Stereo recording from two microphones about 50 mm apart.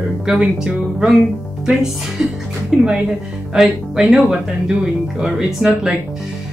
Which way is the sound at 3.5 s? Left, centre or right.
Centre.